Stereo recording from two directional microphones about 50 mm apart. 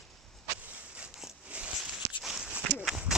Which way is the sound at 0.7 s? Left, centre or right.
Right.